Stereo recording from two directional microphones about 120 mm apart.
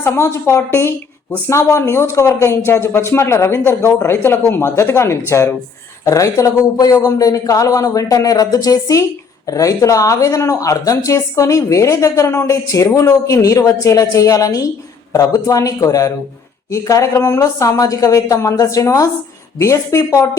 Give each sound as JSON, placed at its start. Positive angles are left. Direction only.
{"t": 0.0, "sound": "speech", "side_deg": 20}